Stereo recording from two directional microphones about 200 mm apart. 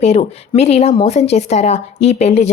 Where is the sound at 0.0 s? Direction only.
35° left (ahead or behind).